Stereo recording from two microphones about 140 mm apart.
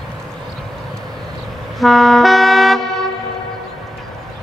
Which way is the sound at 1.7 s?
Centre (ahead or behind).